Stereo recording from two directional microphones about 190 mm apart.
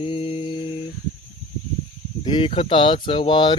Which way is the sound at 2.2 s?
25° left (ahead or behind).